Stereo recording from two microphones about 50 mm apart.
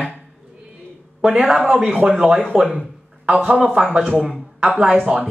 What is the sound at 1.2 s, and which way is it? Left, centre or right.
Speech, centre.